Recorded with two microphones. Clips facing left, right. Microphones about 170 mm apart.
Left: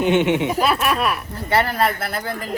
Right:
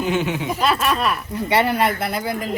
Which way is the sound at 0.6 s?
Centre (ahead or behind).